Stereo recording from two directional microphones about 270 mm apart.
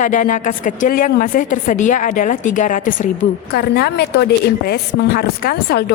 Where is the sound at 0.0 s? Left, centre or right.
Left.